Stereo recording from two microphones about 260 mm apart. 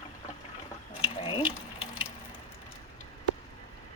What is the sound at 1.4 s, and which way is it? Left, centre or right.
Ratchet, centre.